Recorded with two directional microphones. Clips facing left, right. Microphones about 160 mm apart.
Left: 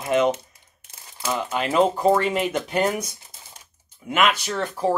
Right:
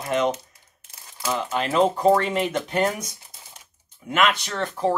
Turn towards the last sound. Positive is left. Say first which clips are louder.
# even
turn(degrees=5)  # may be behind; listen again after turning